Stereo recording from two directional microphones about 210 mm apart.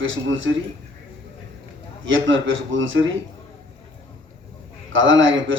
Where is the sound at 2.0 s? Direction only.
65° right (ahead or behind).